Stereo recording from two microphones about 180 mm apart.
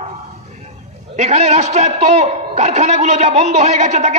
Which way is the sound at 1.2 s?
40° right (ahead or behind).